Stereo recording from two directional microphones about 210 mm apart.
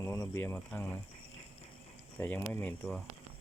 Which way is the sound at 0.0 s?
15° left (ahead or behind).